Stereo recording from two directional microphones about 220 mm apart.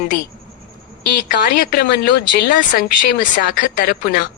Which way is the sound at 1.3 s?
40° left (ahead or behind).